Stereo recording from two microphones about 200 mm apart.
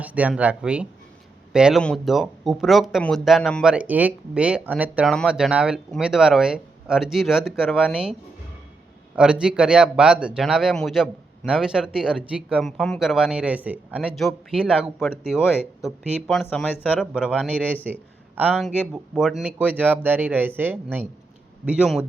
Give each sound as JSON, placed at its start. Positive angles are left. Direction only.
{"t": 0.0, "sound": "speech", "side_deg": -5}
{"t": 9.1, "sound": "speech", "side_deg": -5}